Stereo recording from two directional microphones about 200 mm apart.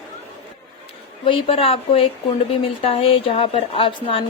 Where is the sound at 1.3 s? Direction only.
30° left (ahead or behind).